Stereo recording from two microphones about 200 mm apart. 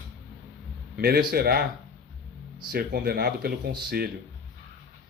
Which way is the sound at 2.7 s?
50° right (ahead or behind).